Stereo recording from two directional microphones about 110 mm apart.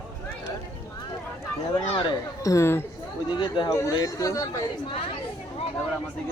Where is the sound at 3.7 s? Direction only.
30° left (ahead or behind).